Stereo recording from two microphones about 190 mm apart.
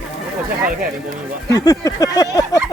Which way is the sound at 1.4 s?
15° left (ahead or behind).